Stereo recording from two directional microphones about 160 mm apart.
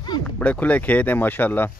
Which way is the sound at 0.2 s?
10° left (ahead or behind).